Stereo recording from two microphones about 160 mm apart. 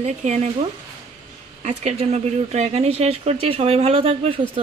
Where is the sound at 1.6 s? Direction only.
45° right (ahead or behind).